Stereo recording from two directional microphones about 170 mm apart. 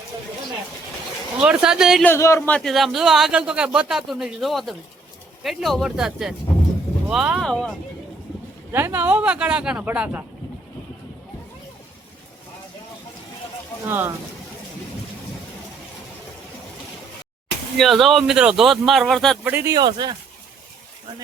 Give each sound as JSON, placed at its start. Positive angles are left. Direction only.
{"t": 1.4, "sound": "speech", "side_deg": -5}
{"t": 2.0, "sound": "a man's voice", "side_deg": 15}
{"t": 2.6, "sound": "speech", "side_deg": 0}
{"t": 8.7, "sound": "speech", "side_deg": -15}
{"t": 13.9, "sound": "speech", "side_deg": -15}
{"t": 17.7, "sound": "speech", "side_deg": 0}
{"t": 19.5, "sound": "speech", "side_deg": -10}
{"t": 19.7, "sound": "speech", "side_deg": -25}